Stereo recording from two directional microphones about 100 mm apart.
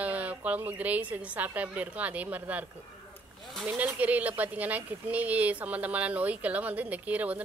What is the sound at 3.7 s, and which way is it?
Speech, 15° right (ahead or behind).